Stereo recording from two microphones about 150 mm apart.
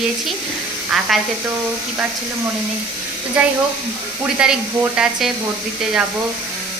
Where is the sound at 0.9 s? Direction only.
5° right (ahead or behind).